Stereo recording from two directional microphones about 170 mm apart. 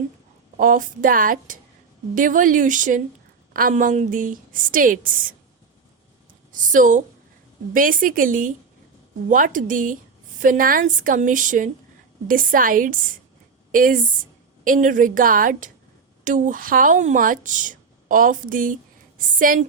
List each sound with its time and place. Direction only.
0.5 s a woman's voice: 50° right (ahead or behind)
6.5 s a woman's voice: 50° right (ahead or behind)